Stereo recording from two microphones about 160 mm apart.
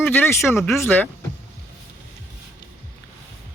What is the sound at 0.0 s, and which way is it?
Speech, 15° left (ahead or behind).